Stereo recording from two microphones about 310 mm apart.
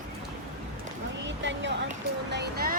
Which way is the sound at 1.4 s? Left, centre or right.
Right.